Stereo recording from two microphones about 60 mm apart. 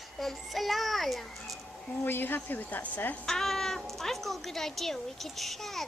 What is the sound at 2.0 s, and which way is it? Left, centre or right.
A woman's voice, left.